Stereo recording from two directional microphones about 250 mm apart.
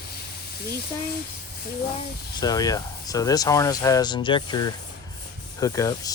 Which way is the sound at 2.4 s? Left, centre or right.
Centre.